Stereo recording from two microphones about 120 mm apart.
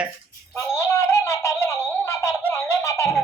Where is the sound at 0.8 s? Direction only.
20° left (ahead or behind).